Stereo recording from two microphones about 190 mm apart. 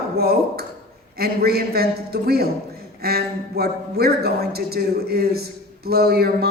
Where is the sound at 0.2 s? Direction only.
55° right (ahead or behind).